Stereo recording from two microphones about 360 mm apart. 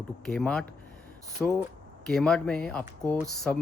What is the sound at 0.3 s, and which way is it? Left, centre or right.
Speech, centre.